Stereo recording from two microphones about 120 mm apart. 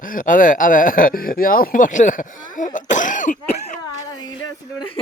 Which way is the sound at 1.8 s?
90° left.